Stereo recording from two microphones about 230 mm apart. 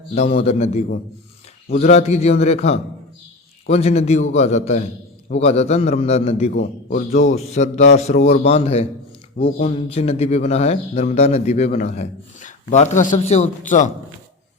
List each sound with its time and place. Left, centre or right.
0.1 s a man's voice: left